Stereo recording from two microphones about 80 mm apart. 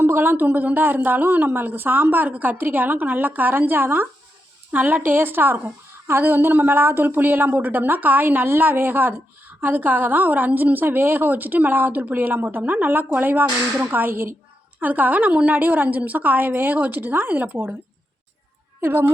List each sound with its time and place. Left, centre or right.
0.0 s a woman's voice: right
18.8 s speech: right